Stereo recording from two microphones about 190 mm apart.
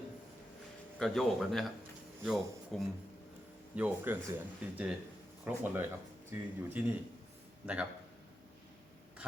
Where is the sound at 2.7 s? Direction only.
Centre (ahead or behind).